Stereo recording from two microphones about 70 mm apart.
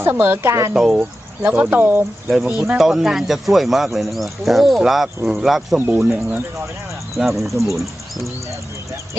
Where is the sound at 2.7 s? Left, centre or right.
Centre.